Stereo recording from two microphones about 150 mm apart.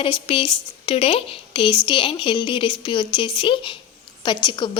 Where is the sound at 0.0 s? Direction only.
35° left (ahead or behind).